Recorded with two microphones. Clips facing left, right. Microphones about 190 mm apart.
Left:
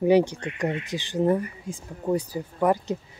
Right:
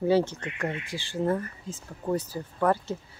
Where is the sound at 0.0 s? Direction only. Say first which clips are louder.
Left 4 dB; 15° left (ahead or behind).